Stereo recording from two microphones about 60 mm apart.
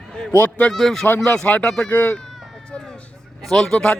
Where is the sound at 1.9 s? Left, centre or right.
Left; by 3.9 s centre.